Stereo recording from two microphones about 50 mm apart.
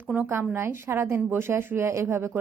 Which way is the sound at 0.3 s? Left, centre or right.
Right.